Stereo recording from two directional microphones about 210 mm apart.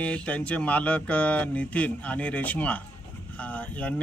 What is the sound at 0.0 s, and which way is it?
Speech, 5° left (ahead or behind).